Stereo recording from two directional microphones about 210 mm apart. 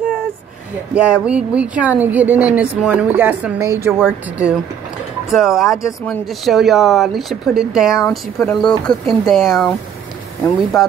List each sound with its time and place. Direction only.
0.9 s a woman's voice: 5° right (ahead or behind)
10.7 s speech: 15° left (ahead or behind)